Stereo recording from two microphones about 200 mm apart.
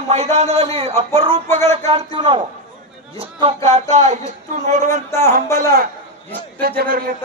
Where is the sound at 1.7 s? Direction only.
30° right (ahead or behind).